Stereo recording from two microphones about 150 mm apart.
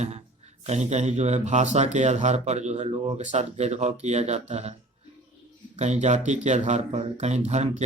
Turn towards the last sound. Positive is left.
turn(degrees=-50)  # may be behind; listen again after turning